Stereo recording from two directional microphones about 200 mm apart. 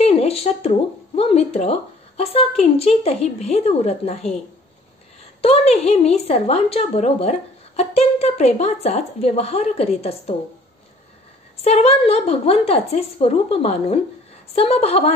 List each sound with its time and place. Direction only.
0.0 s a woman's voice: 30° left (ahead or behind)
5.4 s a woman's voice: 30° left (ahead or behind)
11.6 s a woman's voice: 30° left (ahead or behind)